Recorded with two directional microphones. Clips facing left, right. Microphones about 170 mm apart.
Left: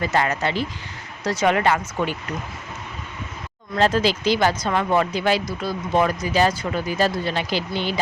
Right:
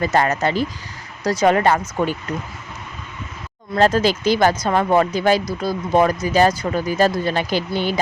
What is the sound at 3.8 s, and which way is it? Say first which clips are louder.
Speech: right 3 dB; 45° right (ahead or behind).